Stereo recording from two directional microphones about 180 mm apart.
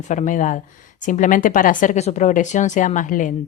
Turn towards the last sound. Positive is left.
turn(degrees=45)  # may be behind; listen again after turning